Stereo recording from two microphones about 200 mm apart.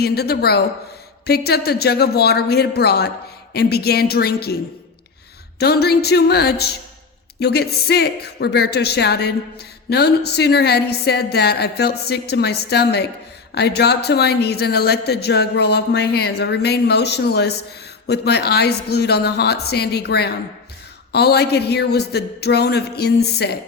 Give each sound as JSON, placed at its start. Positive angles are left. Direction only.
{"t": 0.0, "sound": "a woman's voice", "side_deg": 50}
{"t": 5.5, "sound": "a woman's voice", "side_deg": 55}